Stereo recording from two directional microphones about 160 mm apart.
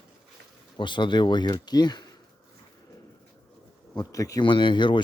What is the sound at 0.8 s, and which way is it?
Speech, 30° left (ahead or behind).